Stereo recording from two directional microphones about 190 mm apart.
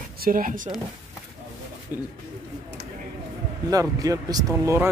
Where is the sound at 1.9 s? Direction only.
10° right (ahead or behind).